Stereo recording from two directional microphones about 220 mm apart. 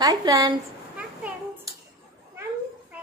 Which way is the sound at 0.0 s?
15° right (ahead or behind).